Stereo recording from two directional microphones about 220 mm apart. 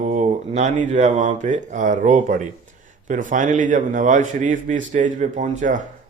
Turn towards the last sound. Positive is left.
turn(degrees=-35)  # may be behind; listen again after turning